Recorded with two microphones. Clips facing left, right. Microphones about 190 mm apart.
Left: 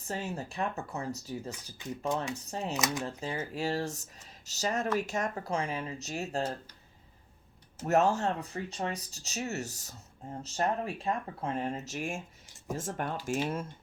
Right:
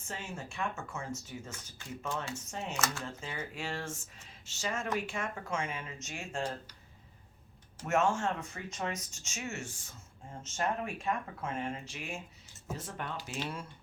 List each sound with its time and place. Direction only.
0.0 s speech: 40° left (ahead or behind)
2.7 s speech: 15° left (ahead or behind)
3.2 s speech: 35° left (ahead or behind)
7.8 s speech: 35° left (ahead or behind)